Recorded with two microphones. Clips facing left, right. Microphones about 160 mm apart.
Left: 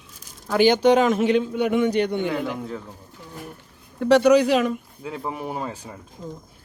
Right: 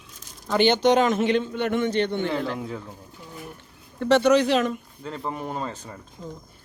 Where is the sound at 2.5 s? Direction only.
Centre (ahead or behind).